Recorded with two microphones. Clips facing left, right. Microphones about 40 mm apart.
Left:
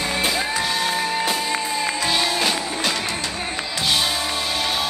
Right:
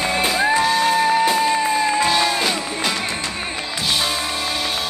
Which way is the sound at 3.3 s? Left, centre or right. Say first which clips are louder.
Right 1 dB; right.